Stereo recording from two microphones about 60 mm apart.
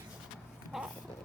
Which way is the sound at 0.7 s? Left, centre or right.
Centre.